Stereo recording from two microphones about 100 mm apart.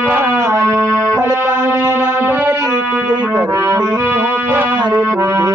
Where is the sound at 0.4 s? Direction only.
35° right (ahead or behind).